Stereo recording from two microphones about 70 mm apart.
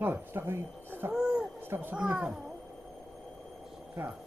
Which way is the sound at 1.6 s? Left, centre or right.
Right.